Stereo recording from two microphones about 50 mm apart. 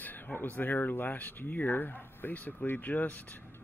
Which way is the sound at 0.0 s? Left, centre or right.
Left.